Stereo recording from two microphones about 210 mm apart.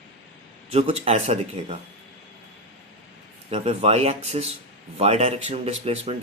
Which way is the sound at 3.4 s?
30° right (ahead or behind).